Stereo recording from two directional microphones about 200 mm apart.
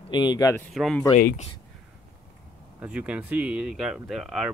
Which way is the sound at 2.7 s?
5° right (ahead or behind).